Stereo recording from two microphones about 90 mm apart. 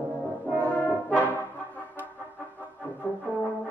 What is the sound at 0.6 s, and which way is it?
Brass instrument, 20° left (ahead or behind).